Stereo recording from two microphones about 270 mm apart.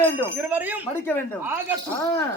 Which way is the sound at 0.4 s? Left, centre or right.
Centre.